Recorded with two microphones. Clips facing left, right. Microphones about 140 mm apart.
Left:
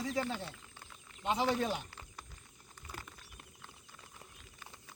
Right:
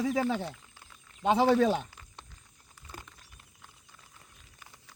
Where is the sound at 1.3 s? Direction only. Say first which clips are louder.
Right 9 dB; 80° right.